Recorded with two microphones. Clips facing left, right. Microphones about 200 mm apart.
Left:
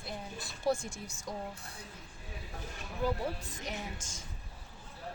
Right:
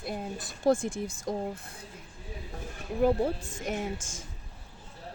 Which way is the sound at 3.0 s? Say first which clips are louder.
Right 8 dB; 50° right (ahead or behind).